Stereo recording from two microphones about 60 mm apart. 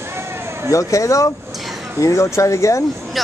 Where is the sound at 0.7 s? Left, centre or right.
Left.